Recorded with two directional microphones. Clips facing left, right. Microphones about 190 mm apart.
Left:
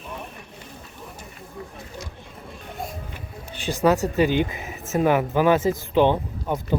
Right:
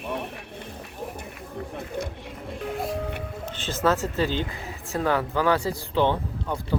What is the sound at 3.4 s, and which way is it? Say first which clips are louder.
Speech: left 4 dB; 15° left (ahead or behind).